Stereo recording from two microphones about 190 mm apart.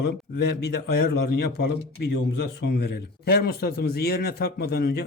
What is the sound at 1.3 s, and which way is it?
A man's voice, 60° left (ahead or behind).